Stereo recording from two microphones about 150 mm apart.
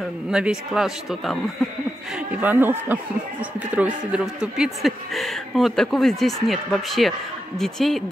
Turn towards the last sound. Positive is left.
turn(degrees=0)  # may be behind; listen again after turning